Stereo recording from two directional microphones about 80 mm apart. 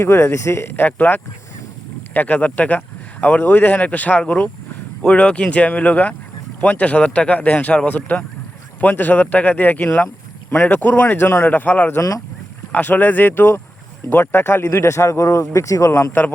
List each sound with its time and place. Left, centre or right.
0.0 s speech: left